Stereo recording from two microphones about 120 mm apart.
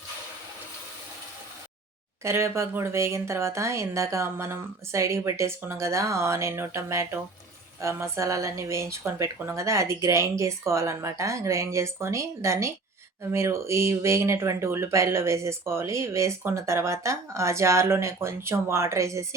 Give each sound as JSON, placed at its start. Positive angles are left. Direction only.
{"t": 2.2, "sound": "speech", "side_deg": -20}